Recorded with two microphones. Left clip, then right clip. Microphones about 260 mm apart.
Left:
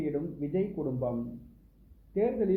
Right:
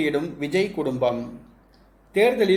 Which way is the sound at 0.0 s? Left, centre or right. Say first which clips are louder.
Right 9 dB; centre.